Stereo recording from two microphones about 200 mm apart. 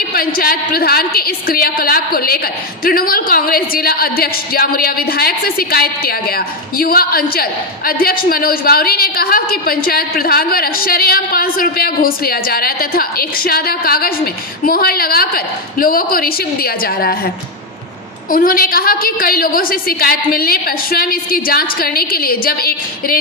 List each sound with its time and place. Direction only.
0.1 s a woman's voice: 45° left (ahead or behind)
18.3 s a woman's voice: 45° left (ahead or behind)